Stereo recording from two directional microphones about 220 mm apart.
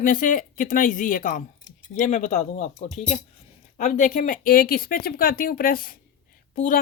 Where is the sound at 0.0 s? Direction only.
35° left (ahead or behind).